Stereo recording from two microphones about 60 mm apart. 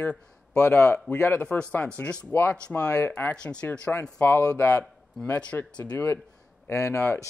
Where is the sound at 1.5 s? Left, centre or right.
Left.